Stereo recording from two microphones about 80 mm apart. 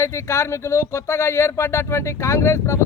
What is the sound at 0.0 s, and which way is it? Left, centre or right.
A man's voice, left.